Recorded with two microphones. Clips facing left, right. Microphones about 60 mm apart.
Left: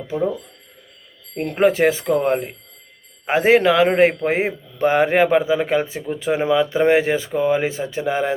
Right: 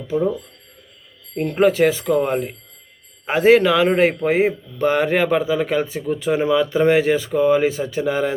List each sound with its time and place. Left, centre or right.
1.4 s speech: centre
1.6 s a man's voice: left